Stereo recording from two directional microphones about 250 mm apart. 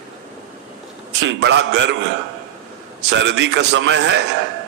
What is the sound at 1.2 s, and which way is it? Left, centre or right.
Speech, right.